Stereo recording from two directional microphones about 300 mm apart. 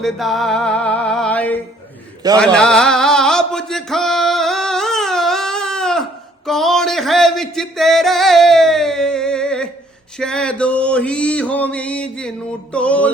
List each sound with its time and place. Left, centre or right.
0.0 s music: centre
10.2 s male singing: centre